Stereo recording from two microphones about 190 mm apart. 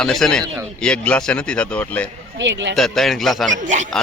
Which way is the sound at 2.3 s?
70° right (ahead or behind).